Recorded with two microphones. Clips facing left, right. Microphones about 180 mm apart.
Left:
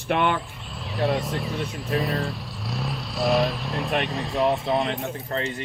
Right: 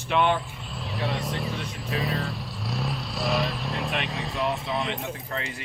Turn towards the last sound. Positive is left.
turn(degrees=30)  # may be behind; listen again after turning